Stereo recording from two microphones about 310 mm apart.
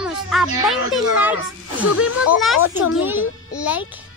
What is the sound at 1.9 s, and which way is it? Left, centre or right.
Speech, left.